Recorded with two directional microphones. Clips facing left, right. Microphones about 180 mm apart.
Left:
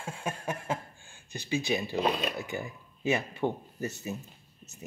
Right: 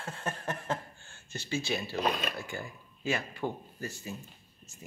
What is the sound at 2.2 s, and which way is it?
Speech, 20° left (ahead or behind).